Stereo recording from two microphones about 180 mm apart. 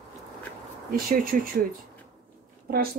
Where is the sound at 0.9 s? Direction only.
50° right (ahead or behind).